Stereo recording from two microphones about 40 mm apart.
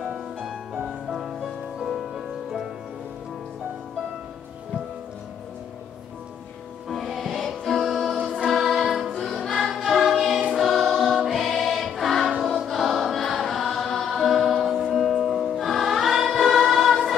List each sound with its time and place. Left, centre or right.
1.0 s music: centre
6.9 s music: centre
8.2 s choir: right
8.5 s music: centre
9.8 s choir: centre
13.4 s chant: centre
14.8 s music: centre